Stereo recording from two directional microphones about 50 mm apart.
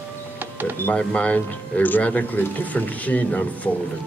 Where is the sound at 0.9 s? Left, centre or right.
Left.